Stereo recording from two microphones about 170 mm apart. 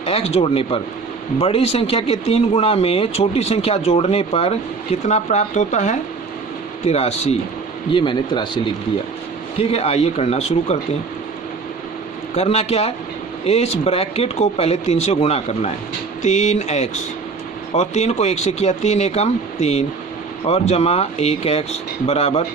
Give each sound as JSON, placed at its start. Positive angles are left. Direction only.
{"t": 0.0, "sound": "speech", "side_deg": 35}
{"t": 12.3, "sound": "speech", "side_deg": 35}